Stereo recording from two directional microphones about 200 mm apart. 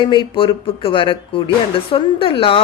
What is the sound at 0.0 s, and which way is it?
Speech, 25° left (ahead or behind).